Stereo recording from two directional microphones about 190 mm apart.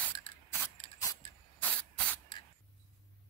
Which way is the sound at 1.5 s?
10° left (ahead or behind).